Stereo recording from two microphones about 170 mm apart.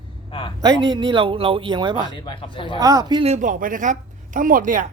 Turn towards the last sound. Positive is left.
turn(degrees=-50)  # may be behind; listen again after turning